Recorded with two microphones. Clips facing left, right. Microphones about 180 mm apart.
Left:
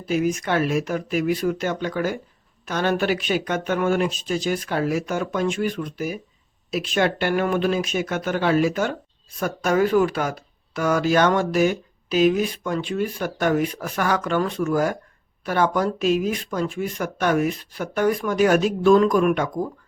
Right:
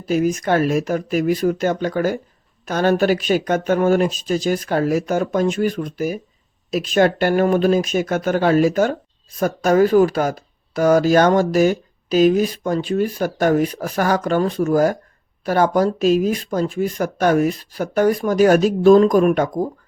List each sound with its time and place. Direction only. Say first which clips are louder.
0.0 s speech: right 4 dB; 40° right (ahead or behind)